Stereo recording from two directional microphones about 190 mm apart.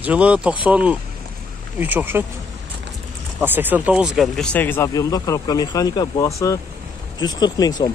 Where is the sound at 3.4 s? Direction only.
10° right (ahead or behind); by 7.7 s 20° left (ahead or behind).